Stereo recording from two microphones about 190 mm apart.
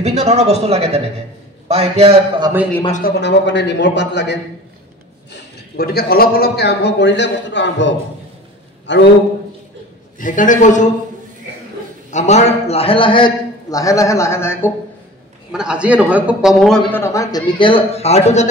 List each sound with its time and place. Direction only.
0.0 s speech: 35° right (ahead or behind)
3.2 s a man's voice: 65° left (ahead or behind)
5.3 s a man's voice: 55° left (ahead or behind); by 9.0 s 70° left (ahead or behind)
10.1 s a man's voice: 45° left (ahead or behind)
12.1 s a man's voice: 40° left (ahead or behind); by 14.7 s 10° left (ahead or behind)
15.5 s a man's voice: 5° right (ahead or behind)
17.0 s a man's voice: 15° left (ahead or behind); by 18.5 s 35° left (ahead or behind)